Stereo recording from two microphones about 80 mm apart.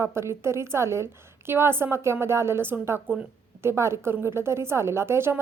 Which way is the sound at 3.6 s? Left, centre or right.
Right.